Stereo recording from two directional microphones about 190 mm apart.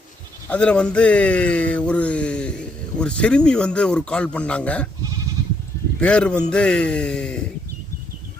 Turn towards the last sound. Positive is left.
turn(degrees=5)  # may be behind; listen again after turning